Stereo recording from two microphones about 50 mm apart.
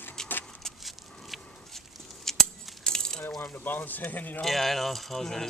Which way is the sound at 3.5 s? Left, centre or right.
Left.